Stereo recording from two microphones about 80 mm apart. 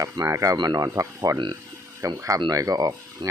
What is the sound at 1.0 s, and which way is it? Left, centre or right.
Speech, right.